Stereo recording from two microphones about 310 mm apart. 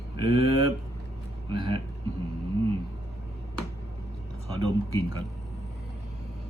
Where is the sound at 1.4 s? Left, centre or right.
Centre.